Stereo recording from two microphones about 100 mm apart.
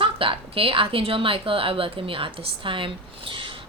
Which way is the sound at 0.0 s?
60° right (ahead or behind).